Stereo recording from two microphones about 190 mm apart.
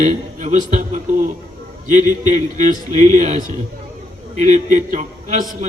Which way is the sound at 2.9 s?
40° right (ahead or behind).